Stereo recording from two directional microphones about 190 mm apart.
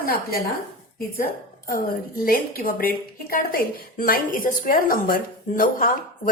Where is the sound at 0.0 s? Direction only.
50° left (ahead or behind).